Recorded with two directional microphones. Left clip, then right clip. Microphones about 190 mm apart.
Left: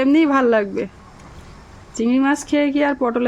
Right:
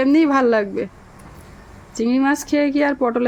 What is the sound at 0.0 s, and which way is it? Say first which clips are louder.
Speech: even; 5° left (ahead or behind).